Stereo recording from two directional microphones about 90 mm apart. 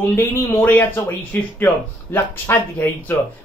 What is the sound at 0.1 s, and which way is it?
Speech, 25° left (ahead or behind).